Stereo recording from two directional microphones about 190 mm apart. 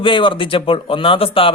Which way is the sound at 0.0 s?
25° left (ahead or behind).